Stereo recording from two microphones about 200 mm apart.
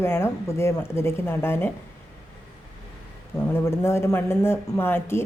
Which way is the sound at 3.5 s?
10° left (ahead or behind).